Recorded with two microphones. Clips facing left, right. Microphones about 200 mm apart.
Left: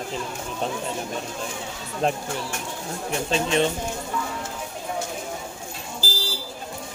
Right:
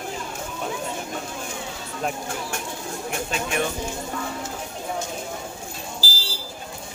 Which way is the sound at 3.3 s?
25° left (ahead or behind).